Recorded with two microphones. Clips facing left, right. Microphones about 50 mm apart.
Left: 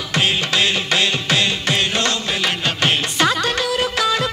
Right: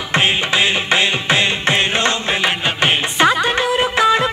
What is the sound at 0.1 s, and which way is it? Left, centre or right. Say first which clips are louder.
Music: right 3 dB; right.